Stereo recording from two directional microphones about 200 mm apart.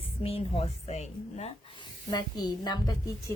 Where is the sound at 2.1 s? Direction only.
20° left (ahead or behind).